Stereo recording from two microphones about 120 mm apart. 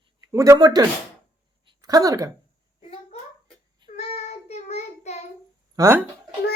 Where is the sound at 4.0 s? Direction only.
65° left (ahead or behind).